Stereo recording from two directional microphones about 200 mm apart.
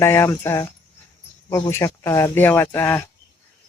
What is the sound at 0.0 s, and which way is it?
Speech, 15° left (ahead or behind).